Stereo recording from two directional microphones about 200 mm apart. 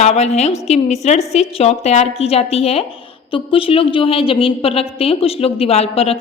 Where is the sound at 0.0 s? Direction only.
35° left (ahead or behind).